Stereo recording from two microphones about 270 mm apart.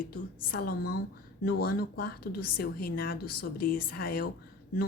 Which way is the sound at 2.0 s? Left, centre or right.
Left.